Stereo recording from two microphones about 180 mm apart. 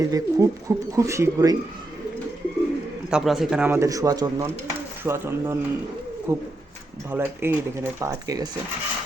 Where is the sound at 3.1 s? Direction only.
5° right (ahead or behind).